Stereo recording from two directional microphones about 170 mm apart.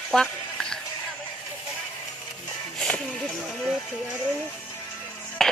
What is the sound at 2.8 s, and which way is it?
Music, 5° left (ahead or behind).